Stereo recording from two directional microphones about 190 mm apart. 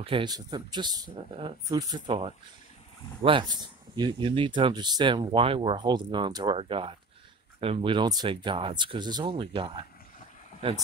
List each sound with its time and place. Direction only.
0.0 s speech: 25° right (ahead or behind)